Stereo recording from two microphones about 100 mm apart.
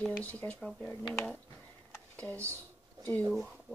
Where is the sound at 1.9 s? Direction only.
20° left (ahead or behind).